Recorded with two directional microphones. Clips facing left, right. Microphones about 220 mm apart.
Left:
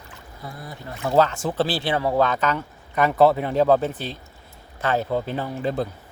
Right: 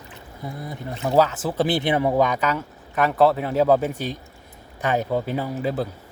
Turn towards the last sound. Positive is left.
turn(degrees=-5)  # may be behind; listen again after turning